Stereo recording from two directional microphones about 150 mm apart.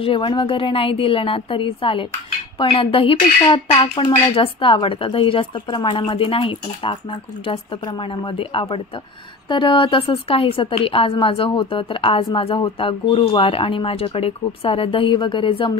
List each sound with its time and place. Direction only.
0.0 s speech: 35° left (ahead or behind)